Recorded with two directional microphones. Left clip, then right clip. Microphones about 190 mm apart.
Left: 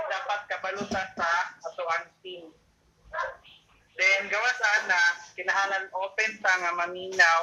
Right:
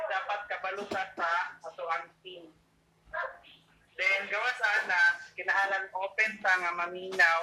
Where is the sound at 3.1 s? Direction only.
25° left (ahead or behind).